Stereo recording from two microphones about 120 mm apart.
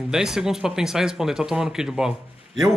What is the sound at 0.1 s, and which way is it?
Speech, 5° right (ahead or behind).